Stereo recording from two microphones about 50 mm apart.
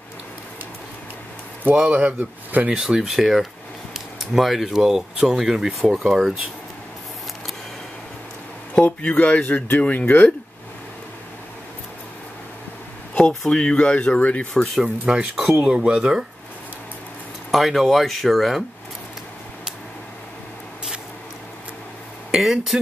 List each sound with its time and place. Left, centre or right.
1.6 s speech: right
2.7 s speech: centre
3.0 s speech: centre
8.7 s speech: left
13.2 s speech: centre
13.5 s speech: centre
14.8 s speech: centre
17.5 s speech: centre
22.4 s speech: centre